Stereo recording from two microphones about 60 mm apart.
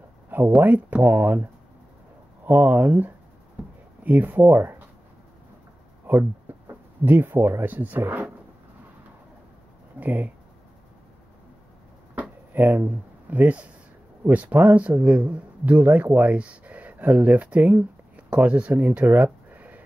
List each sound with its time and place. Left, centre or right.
0.6 s speech: right
3.6 s a sound: right
4.0 s speech: right
6.1 s speech: right
6.5 s a sound: right
7.1 s speech: right
9.9 s speech: right
12.2 s a sound: right
14.2 s speech: right